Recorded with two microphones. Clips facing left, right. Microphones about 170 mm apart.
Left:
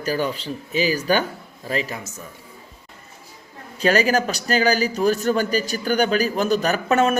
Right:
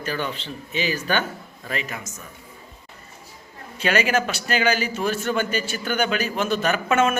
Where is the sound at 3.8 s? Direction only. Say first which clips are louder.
Left 3 dB; 40° left (ahead or behind).